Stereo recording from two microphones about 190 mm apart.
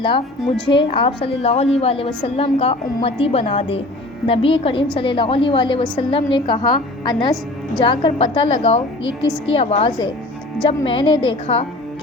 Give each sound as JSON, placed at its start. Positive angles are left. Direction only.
{"t": 0.7, "sound": "a woman's voice", "side_deg": 25}